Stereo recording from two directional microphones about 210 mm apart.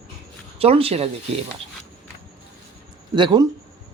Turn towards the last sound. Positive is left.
turn(degrees=-20)  # may be behind; listen again after turning